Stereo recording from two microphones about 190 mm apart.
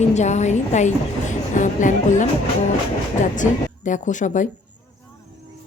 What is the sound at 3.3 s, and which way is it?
A woman's voice, 40° left (ahead or behind).